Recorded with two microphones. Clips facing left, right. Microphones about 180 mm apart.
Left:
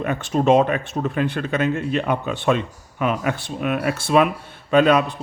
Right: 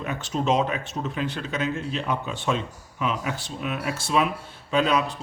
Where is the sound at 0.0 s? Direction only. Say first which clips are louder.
Left 7 dB; 55° left (ahead or behind).